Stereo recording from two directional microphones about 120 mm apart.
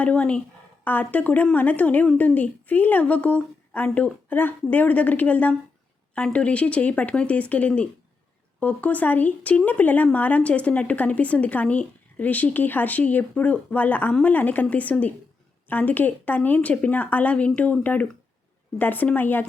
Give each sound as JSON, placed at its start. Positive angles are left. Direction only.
{"t": 0.0, "sound": "speech", "side_deg": 10}